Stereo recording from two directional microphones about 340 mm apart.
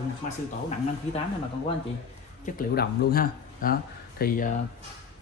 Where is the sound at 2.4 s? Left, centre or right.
Left.